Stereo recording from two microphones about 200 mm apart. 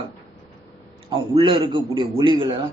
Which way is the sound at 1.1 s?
25° right (ahead or behind).